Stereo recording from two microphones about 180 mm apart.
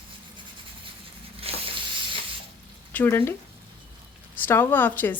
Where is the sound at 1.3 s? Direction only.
30° right (ahead or behind).